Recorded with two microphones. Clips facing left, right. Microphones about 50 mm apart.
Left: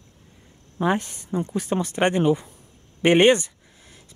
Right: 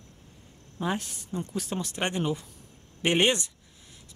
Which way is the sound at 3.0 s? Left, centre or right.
Left.